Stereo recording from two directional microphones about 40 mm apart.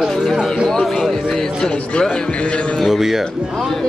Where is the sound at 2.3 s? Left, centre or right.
Left.